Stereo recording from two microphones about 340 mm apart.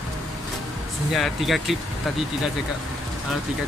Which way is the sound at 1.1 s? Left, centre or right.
Centre.